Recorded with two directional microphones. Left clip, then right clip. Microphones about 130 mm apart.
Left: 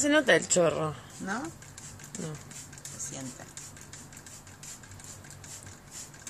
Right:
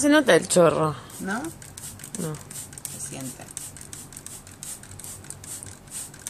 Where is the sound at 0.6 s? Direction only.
30° right (ahead or behind).